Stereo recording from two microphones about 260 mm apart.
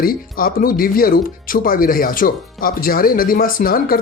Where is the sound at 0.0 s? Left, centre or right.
Left.